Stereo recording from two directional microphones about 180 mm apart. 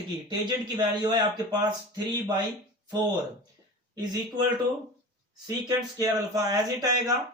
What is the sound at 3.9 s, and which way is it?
Speech, 20° right (ahead or behind).